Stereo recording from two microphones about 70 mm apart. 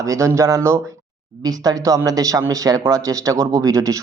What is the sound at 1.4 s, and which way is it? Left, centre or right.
Speech, right.